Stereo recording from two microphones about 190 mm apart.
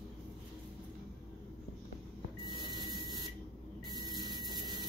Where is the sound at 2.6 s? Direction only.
20° right (ahead or behind).